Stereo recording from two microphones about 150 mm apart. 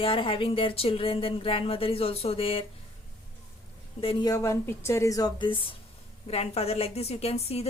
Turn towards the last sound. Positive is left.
turn(degrees=45)  # may be behind; listen again after turning